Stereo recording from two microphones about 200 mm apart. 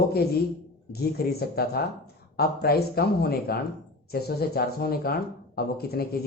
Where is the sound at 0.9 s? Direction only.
50° left (ahead or behind).